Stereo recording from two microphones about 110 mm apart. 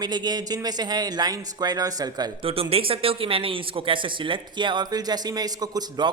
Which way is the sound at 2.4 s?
60° right (ahead or behind).